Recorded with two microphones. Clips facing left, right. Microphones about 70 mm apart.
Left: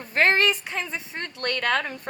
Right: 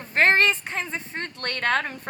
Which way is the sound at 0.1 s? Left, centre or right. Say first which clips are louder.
Right 1 dB; right.